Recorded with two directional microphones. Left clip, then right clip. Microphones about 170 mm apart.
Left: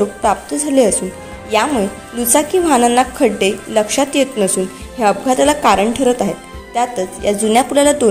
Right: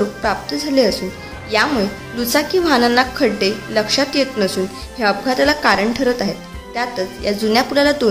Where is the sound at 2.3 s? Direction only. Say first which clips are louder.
Left 2 dB; 15° left (ahead or behind).